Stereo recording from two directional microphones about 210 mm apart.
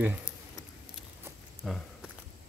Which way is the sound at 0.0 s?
10° right (ahead or behind).